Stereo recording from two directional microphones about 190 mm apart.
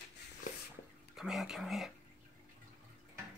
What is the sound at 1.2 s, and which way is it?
Speech, centre (ahead or behind).